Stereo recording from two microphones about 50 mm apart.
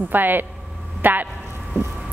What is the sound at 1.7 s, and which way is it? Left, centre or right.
Speech, right.